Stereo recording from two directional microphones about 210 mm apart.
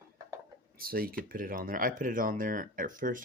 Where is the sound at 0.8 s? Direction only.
45° right (ahead or behind).